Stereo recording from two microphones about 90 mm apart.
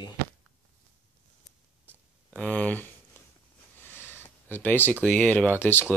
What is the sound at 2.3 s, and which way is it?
Speech, 15° left (ahead or behind).